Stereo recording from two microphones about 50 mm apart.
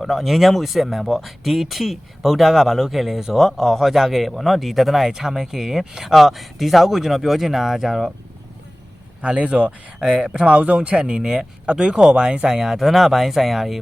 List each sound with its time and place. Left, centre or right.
0.0 s speech: centre
9.2 s speech: right
10.0 s speech: centre